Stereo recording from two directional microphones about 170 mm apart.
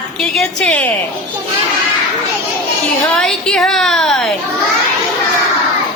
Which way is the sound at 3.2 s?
5° left (ahead or behind).